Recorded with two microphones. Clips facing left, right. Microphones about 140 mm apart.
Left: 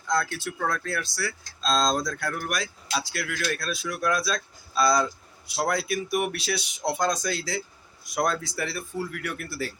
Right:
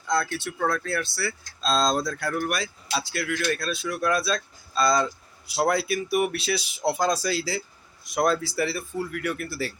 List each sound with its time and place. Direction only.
0.1 s speech: centre (ahead or behind)